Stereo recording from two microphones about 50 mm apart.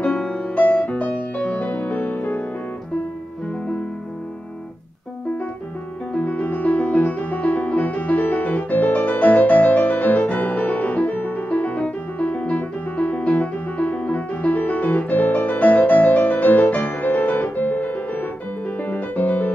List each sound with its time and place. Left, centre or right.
0.0 s music: left
6.1 s music: left